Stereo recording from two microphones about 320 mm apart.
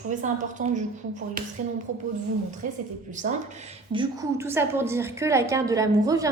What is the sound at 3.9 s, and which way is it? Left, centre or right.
A woman's voice, centre.